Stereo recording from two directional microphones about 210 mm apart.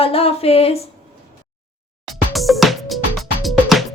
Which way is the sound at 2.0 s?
Centre (ahead or behind).